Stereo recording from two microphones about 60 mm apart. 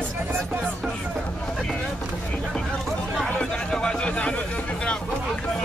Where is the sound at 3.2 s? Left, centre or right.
Centre.